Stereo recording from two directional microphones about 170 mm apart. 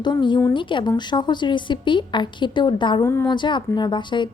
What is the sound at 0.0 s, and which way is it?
A woman's voice, 25° left (ahead or behind).